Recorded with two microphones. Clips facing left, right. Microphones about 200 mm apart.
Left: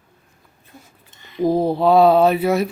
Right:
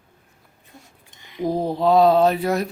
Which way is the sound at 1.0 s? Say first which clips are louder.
Left 2 dB; 15° right (ahead or behind).